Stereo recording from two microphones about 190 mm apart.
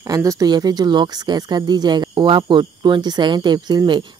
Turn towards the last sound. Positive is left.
turn(degrees=-25)  # may be behind; listen again after turning